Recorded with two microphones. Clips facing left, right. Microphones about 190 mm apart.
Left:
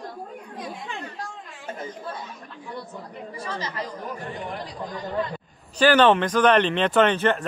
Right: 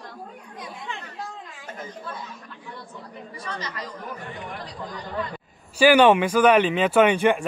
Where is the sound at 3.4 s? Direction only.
30° left (ahead or behind).